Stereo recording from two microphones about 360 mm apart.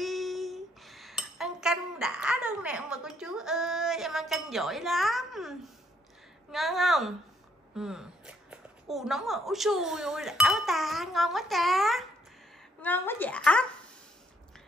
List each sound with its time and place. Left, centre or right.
0.0 s dishes: centre
6.5 s speech: centre